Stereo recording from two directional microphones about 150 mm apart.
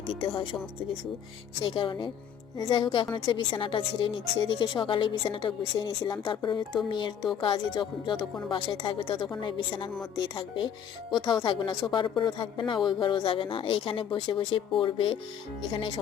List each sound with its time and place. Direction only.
1.6 s a woman's voice: 35° left (ahead or behind)